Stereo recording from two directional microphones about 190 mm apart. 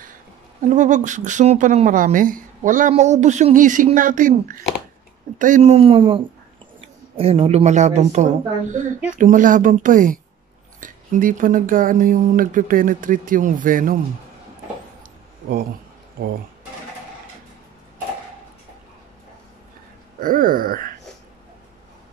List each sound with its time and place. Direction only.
0.7 s speech: 40° right (ahead or behind)
16.2 s speech: 50° right (ahead or behind)
20.2 s speech: 45° right (ahead or behind)